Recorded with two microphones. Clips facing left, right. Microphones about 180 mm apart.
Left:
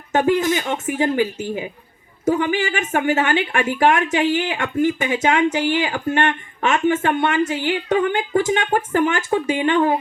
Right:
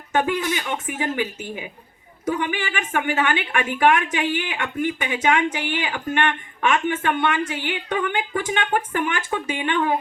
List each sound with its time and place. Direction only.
0.1 s speech: 45° left (ahead or behind)